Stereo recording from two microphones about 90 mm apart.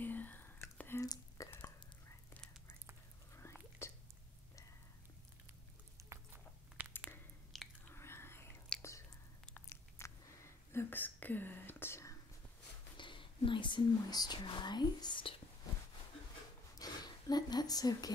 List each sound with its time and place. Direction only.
0.0 s whispering: 20° left (ahead or behind)
1.0 s whispering: 45° left (ahead or behind)
3.8 s a sound: 30° left (ahead or behind)
6.0 s a sound: 35° right (ahead or behind)
6.8 s a sound: 20° right (ahead or behind)
7.5 s chewing: centre (ahead or behind)
7.9 s biting: 30° left (ahead or behind)
9.7 s whispering: 30° left (ahead or behind)
12.9 s speech: 65° left (ahead or behind)
16.7 s whispering: 45° left (ahead or behind)